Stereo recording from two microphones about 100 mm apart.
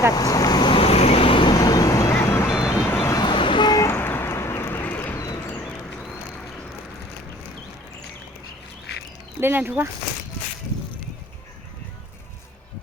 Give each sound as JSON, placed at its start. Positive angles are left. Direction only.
{"t": 0.1, "sound": "waves", "side_deg": 40}
{"t": 0.8, "sound": "vehicle", "side_deg": 85}
{"t": 1.5, "sound": "vehicle", "side_deg": 40}
{"t": 2.5, "sound": "vehicle", "side_deg": -10}
{"t": 2.9, "sound": "vehicle", "side_deg": 25}
{"t": 3.2, "sound": "vehicle", "side_deg": 55}
{"t": 3.8, "sound": "a sound", "side_deg": 20}
{"t": 9.4, "sound": "speech", "side_deg": -20}